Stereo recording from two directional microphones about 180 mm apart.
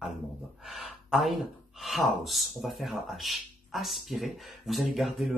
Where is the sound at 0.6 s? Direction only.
Centre (ahead or behind).